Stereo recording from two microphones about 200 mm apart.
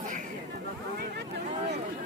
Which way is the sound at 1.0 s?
55° right (ahead or behind).